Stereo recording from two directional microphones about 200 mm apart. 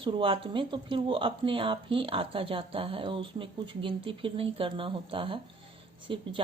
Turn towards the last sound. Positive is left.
turn(degrees=-25)  # may be behind; listen again after turning